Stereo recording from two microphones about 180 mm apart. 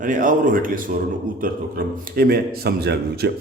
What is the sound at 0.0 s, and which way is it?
Speech, 50° right (ahead or behind).